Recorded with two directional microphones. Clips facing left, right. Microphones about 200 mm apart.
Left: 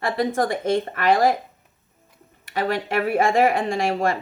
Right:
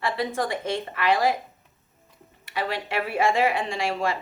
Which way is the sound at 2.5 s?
45° left (ahead or behind).